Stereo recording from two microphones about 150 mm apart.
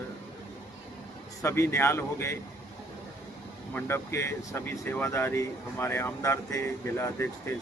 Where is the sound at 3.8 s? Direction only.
15° left (ahead or behind).